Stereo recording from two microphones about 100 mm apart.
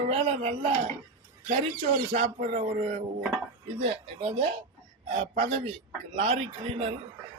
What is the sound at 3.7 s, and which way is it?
A man's voice, 90° right.